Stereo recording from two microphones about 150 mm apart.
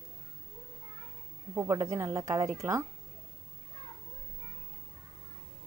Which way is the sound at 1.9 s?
20° right (ahead or behind).